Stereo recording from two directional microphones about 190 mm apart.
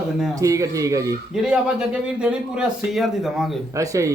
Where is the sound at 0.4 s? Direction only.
15° right (ahead or behind).